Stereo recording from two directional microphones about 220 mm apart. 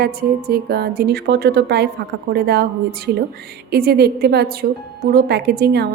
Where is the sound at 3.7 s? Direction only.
45° right (ahead or behind).